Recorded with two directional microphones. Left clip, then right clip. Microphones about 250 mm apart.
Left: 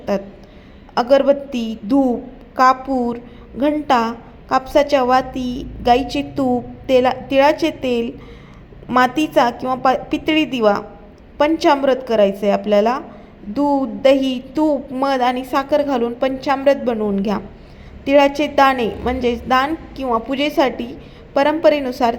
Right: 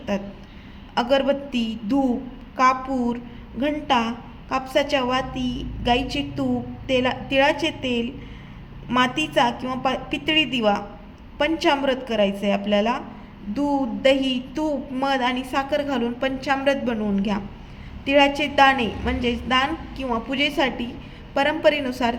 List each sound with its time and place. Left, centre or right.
0.1 s a woman's voice: left